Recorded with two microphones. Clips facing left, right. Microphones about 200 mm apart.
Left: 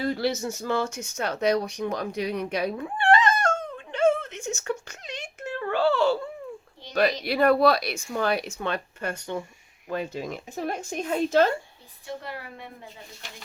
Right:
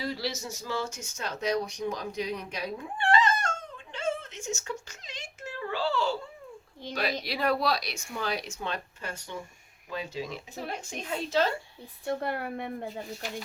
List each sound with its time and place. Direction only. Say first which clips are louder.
0.0 s speech: left 7 dB; 55° left (ahead or behind)
3.9 s a sound: left 10 dB; 60° left (ahead or behind)
6.9 s speech: left 8 dB; 55° left (ahead or behind)
12.0 s a woman's voice: right 5 dB; 55° right (ahead or behind)